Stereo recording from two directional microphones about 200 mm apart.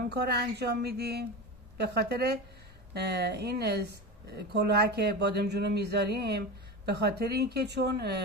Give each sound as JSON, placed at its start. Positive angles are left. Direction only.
{"t": 0.1, "sound": "speech", "side_deg": -55}